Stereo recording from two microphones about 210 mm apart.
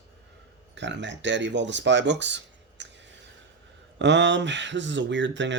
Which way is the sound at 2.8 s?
60° right (ahead or behind).